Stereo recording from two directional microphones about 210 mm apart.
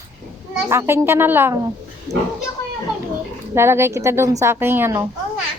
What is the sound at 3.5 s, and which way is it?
Speech, 10° right (ahead or behind).